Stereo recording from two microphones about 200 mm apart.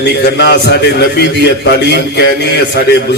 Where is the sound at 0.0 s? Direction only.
55° left (ahead or behind).